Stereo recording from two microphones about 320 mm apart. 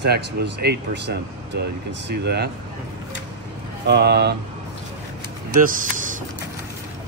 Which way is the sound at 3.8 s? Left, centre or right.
Right.